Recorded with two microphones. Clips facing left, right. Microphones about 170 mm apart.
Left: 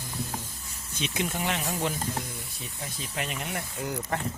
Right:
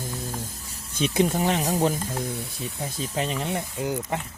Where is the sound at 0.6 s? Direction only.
35° right (ahead or behind).